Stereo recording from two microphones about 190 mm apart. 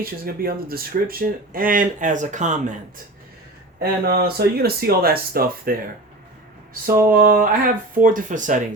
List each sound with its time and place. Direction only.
0.0 s speech: 50° right (ahead or behind)
3.8 s speech: 55° right (ahead or behind)
6.8 s speech: 50° right (ahead or behind)